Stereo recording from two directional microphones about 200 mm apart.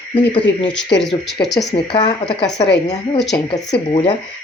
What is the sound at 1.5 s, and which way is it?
Speech, 25° left (ahead or behind).